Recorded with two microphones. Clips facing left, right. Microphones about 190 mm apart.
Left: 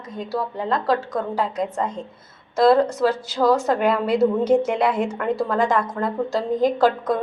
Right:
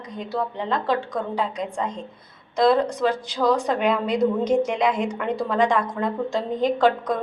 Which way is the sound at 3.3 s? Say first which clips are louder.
Left 3 dB; 5° left (ahead or behind).